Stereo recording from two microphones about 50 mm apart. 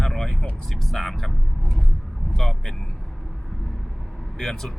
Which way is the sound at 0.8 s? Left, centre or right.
Centre.